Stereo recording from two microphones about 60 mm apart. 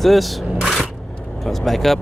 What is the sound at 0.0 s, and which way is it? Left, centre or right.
Speech, centre.